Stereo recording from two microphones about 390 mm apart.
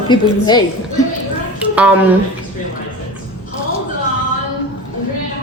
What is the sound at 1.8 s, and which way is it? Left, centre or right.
Speech, centre.